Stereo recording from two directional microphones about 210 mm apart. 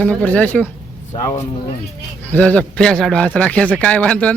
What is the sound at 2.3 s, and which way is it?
A man's voice, 5° left (ahead or behind).